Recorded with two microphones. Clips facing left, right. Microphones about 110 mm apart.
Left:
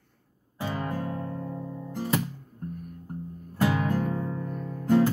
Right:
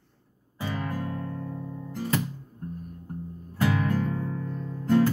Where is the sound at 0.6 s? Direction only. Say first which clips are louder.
Left 1 dB; 15° left (ahead or behind).